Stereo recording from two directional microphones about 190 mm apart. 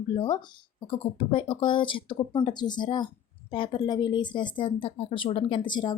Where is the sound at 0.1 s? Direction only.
25° left (ahead or behind).